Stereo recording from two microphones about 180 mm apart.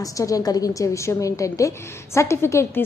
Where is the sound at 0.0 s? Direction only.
20° left (ahead or behind).